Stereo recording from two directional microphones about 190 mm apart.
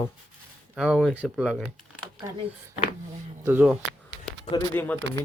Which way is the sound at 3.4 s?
10° right (ahead or behind).